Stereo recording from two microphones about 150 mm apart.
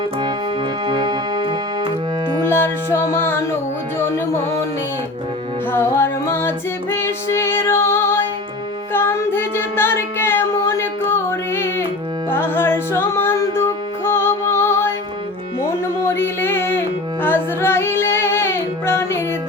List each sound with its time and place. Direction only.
0.9 s music: 30° right (ahead or behind)
2.5 s music: 15° left (ahead or behind)
5.7 s music: 15° left (ahead or behind)
6.9 s female singing: 15° left (ahead or behind)
8.9 s child singing: 15° left (ahead or behind)
12.3 s music: 15° left (ahead or behind)
16.0 s a sound: 15° left (ahead or behind)
17.2 s music: 15° left (ahead or behind)